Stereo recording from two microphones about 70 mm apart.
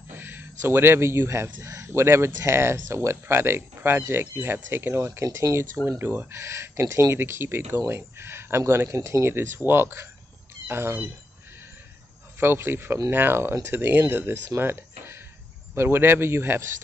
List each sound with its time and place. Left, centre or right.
0.1 s a sound: right
0.6 s speech: right
12.4 s speech: right